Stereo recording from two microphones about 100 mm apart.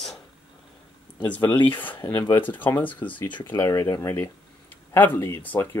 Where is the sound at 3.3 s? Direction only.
50° left (ahead or behind).